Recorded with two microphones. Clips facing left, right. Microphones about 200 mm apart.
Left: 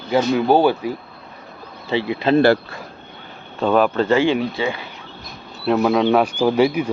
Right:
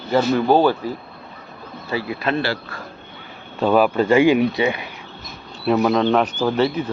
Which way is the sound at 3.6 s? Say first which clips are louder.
Even; 5° right (ahead or behind).